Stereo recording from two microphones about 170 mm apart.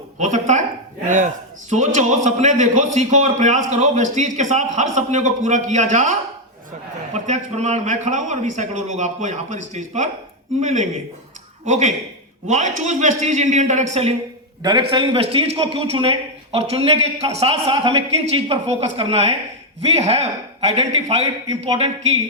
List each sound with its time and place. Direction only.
0.2 s a man's voice: 45° right (ahead or behind)
14.6 s a man's voice: 25° right (ahead or behind)